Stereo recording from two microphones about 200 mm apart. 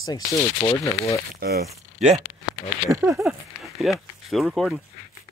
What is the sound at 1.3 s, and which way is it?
Speech, 55° right (ahead or behind).